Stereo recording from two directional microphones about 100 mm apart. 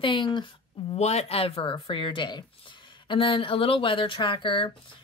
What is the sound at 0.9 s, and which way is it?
Speech, 90° left.